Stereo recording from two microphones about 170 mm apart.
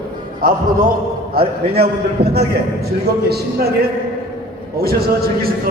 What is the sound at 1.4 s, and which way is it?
A man's voice, 65° right (ahead or behind).